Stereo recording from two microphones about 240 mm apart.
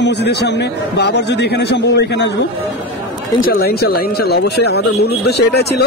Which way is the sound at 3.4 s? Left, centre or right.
Left.